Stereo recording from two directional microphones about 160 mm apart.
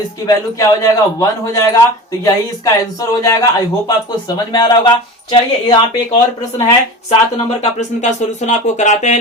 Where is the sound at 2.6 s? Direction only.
20° left (ahead or behind).